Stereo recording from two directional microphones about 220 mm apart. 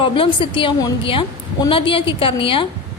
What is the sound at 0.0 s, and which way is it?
A woman's voice, 25° left (ahead or behind).